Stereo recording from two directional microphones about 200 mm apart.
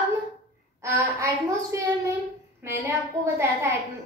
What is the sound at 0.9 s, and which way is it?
A woman's voice, 15° right (ahead or behind).